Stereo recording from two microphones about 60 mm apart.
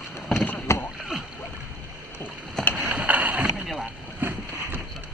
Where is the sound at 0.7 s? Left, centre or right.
Left.